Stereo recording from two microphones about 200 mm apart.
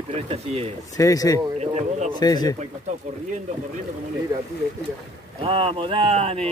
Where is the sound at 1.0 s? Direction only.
15° left (ahead or behind).